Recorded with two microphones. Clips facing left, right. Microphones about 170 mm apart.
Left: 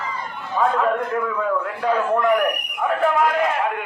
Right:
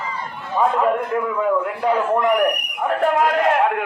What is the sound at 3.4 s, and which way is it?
Speech, 65° right (ahead or behind).